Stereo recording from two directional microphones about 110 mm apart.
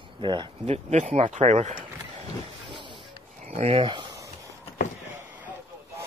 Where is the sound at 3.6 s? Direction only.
70° right (ahead or behind).